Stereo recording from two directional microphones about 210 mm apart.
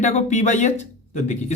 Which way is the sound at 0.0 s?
35° left (ahead or behind).